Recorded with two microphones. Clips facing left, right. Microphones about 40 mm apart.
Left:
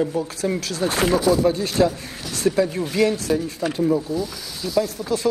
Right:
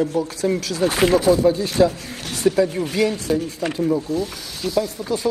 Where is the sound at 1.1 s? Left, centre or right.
Right.